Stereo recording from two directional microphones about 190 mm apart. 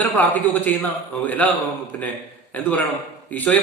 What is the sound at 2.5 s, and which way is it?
A man's voice, 10° left (ahead or behind).